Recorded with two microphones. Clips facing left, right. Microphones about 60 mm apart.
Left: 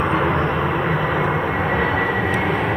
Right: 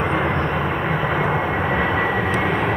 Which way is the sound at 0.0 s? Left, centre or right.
Centre.